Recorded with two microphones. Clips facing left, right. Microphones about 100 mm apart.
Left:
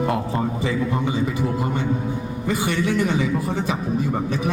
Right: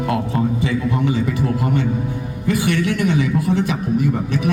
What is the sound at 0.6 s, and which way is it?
A man's voice, 30° left (ahead or behind).